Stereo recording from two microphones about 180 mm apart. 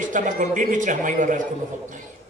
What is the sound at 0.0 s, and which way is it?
A man's voice, 45° right (ahead or behind).